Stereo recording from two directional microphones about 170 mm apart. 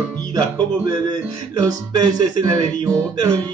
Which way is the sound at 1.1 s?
25° right (ahead or behind).